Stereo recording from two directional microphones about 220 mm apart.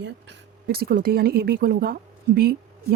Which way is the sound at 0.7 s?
45° right (ahead or behind).